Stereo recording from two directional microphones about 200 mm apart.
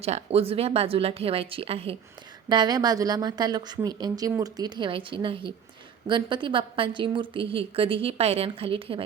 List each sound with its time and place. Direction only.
0.0 s a woman's voice: 30° right (ahead or behind)